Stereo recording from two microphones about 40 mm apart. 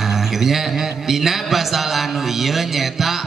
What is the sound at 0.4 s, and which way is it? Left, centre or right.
A man's voice, centre.